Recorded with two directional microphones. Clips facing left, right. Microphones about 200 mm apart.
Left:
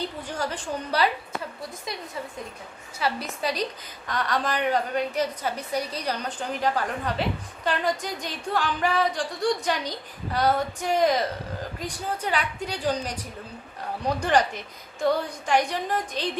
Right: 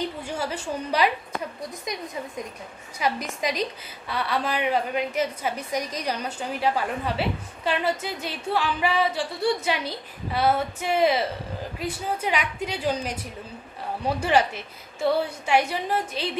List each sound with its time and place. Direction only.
0.2 s a woman's voice: 10° right (ahead or behind)